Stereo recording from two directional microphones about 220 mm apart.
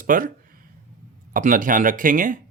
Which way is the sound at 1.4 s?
35° right (ahead or behind).